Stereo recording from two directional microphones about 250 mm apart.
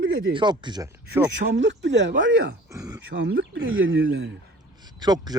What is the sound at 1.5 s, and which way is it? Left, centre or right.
Speech, right.